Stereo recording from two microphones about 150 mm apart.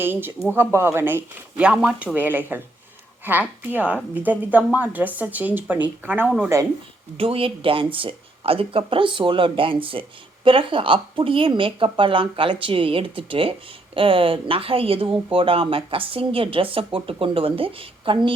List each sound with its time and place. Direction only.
0.0 s a woman's voice: 15° right (ahead or behind)
6.2 s speech: centre (ahead or behind)
7.2 s speech: 40° right (ahead or behind)